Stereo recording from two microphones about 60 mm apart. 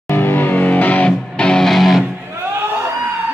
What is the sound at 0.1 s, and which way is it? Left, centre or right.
Music, left.